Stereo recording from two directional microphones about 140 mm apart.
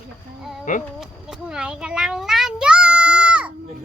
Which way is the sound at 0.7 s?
70° left (ahead or behind).